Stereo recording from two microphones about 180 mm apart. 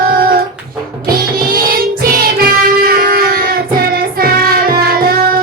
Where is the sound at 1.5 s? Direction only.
55° right (ahead or behind).